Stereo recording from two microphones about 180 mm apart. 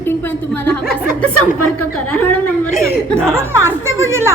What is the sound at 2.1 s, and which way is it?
A woman's voice, 10° left (ahead or behind).